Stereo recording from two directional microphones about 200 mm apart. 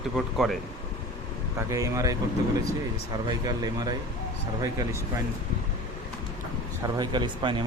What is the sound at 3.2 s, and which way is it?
Speech, 20° right (ahead or behind).